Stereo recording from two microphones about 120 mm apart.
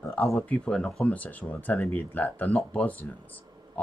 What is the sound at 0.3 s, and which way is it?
Speech, 5° left (ahead or behind).